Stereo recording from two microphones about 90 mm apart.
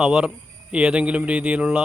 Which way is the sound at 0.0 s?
10° right (ahead or behind).